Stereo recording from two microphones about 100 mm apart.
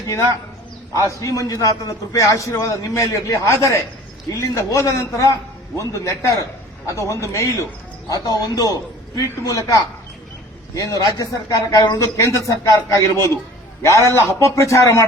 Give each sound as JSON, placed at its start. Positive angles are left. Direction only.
{"t": 1.0, "sound": "speech", "side_deg": 30}
{"t": 14.0, "sound": "a man's voice", "side_deg": -30}
{"t": 14.3, "sound": "speech", "side_deg": 30}